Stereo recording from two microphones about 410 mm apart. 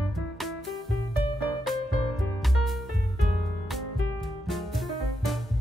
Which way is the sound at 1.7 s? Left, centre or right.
Centre.